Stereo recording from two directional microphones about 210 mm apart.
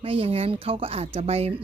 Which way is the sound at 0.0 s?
25° right (ahead or behind).